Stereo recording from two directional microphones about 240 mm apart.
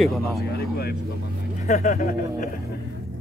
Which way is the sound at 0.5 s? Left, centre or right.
Left.